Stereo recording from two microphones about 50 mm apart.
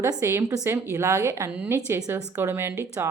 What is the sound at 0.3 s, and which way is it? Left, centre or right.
Speech, right.